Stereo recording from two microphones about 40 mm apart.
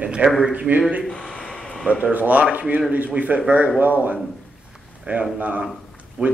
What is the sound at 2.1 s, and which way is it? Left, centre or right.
A man's voice, right.